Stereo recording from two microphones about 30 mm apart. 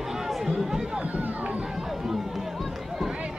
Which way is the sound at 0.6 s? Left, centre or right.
Centre.